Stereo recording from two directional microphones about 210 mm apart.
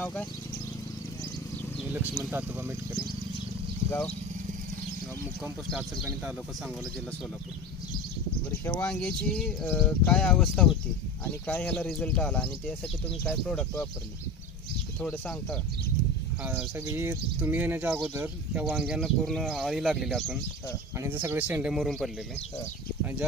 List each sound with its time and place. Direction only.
0.0 s speech: 5° left (ahead or behind)
1.9 s speech: 10° right (ahead or behind)
5.4 s speech: 5° right (ahead or behind)
8.6 s speech: 5° left (ahead or behind)
15.0 s speech: 5° left (ahead or behind)
16.4 s speech: 10° right (ahead or behind)
21.0 s speech: 10° right (ahead or behind)